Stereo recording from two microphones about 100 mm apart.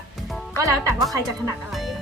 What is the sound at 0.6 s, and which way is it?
Speech, 30° right (ahead or behind).